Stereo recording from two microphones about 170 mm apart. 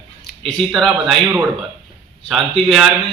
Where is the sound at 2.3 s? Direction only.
Centre (ahead or behind).